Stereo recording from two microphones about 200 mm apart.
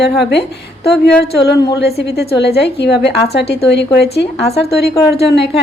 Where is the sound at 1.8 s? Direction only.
55° left (ahead or behind).